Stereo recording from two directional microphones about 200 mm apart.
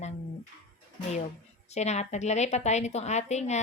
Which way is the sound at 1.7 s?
35° left (ahead or behind).